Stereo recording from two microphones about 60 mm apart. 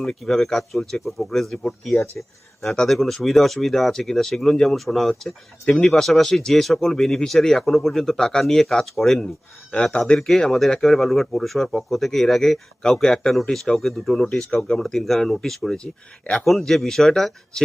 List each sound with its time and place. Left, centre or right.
0.0 s speech: centre
9.7 s speech: centre
10.2 s speech: centre
14.3 s speech: centre
15.8 s speech: left
16.4 s speech: centre